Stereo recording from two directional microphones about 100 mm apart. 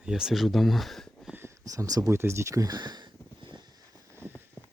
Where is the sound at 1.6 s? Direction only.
35° right (ahead or behind).